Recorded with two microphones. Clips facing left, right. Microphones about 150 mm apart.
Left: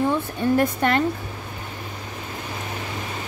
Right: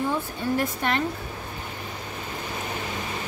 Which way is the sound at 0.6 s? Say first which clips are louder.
Left 5 dB; 55° left (ahead or behind).